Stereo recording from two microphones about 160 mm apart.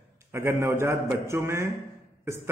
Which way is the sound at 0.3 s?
15° right (ahead or behind).